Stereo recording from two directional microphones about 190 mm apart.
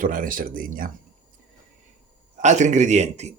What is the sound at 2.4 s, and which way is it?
Speech, 40° right (ahead or behind).